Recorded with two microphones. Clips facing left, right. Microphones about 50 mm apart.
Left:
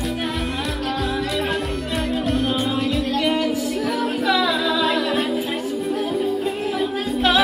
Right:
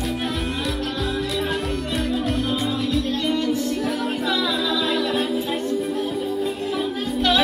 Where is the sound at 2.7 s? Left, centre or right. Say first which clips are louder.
Left 2 dB; left.